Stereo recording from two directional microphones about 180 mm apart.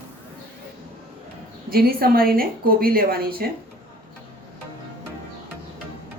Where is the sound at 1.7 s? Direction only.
55° right (ahead or behind).